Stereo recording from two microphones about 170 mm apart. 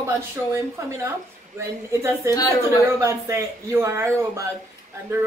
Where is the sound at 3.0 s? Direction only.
15° right (ahead or behind).